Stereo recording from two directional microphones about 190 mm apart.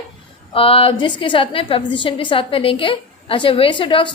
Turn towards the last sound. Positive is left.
turn(degrees=25)  # may be behind; listen again after turning